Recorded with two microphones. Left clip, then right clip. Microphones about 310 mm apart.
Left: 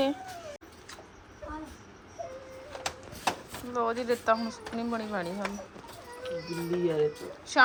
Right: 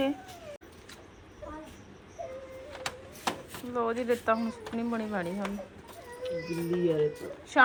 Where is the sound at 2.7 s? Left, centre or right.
Left.